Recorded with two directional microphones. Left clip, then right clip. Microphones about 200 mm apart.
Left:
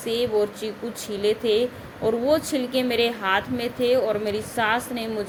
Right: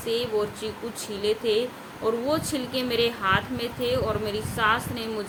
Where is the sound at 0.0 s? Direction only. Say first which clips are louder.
Left 3 dB; 20° left (ahead or behind).